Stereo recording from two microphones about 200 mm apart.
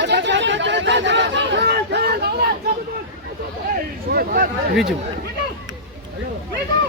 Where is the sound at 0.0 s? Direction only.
60° right (ahead or behind).